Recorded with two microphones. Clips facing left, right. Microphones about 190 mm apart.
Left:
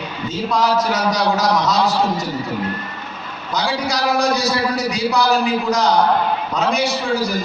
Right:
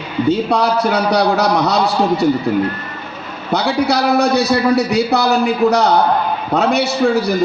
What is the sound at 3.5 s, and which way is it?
A man's voice, 65° right (ahead or behind).